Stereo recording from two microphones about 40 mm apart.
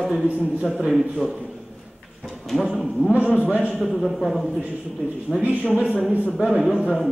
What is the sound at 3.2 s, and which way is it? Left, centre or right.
Speech, right.